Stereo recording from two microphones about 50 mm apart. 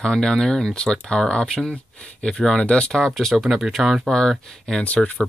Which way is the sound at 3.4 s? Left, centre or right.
Centre.